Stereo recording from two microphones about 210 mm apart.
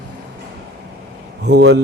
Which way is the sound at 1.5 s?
55° right (ahead or behind).